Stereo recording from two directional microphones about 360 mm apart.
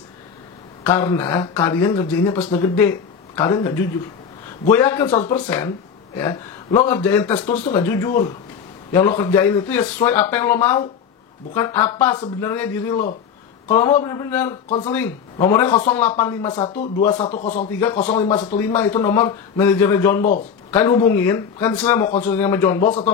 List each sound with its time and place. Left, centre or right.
0.8 s a man's voice: centre
6.1 s a man's voice: centre
17.6 s speech: centre
18.1 s speech: centre
18.6 s speech: centre